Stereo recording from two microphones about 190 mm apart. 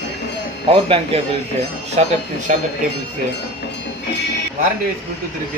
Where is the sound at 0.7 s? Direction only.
30° right (ahead or behind).